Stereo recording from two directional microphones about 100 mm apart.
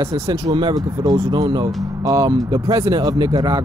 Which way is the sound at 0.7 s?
35° right (ahead or behind).